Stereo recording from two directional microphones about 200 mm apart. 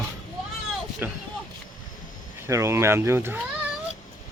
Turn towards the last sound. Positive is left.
turn(degrees=-10)  # may be behind; listen again after turning